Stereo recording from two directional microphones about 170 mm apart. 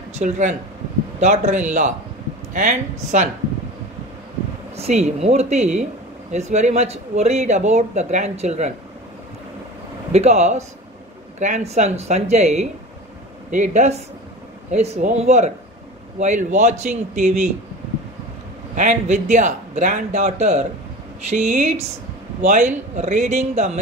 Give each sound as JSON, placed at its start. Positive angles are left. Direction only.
{"t": 0.1, "sound": "a man's voice", "side_deg": -45}
{"t": 4.7, "sound": "speech", "side_deg": -40}
{"t": 10.1, "sound": "a man's voice", "side_deg": -40}
{"t": 18.8, "sound": "a man's voice", "side_deg": -45}